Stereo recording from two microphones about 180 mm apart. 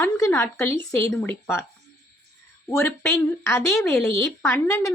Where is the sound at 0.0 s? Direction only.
10° left (ahead or behind).